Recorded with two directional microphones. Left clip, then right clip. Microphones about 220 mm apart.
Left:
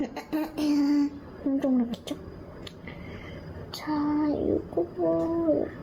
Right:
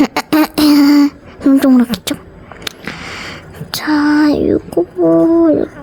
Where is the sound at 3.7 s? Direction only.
50° right (ahead or behind).